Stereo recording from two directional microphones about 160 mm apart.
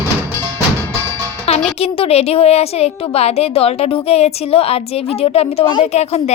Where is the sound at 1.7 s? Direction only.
40° left (ahead or behind).